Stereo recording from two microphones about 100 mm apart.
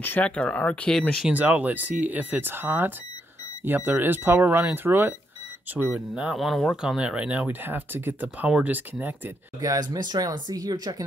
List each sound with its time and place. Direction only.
0.0 s speech: 15° left (ahead or behind)
1.2 s speech: 15° right (ahead or behind)
5.7 s speech: 10° right (ahead or behind)
9.6 s speech: 40° right (ahead or behind)